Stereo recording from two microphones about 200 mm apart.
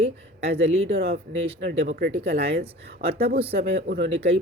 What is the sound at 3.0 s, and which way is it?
Speech, 45° right (ahead or behind).